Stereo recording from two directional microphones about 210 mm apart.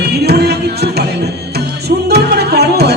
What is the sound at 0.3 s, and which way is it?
Music, 50° right (ahead or behind).